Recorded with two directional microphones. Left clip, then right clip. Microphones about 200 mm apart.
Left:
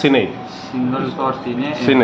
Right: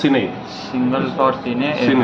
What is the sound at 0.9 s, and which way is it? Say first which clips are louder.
Speech: right 4 dB; 50° right (ahead or behind).